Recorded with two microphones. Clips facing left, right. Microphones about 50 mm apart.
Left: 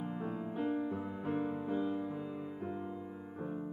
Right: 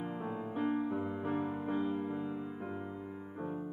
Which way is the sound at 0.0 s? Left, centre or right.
Right.